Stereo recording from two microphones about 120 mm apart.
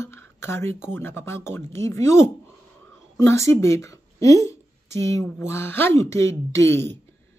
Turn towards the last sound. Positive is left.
turn(degrees=20)  # may be behind; listen again after turning